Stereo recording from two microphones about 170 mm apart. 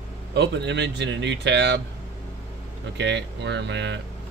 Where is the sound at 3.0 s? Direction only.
90° right.